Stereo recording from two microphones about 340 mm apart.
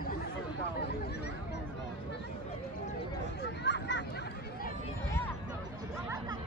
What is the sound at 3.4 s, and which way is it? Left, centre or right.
Hubbub, left.